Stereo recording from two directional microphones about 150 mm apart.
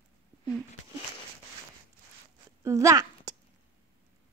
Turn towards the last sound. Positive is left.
turn(degrees=-25)  # may be behind; listen again after turning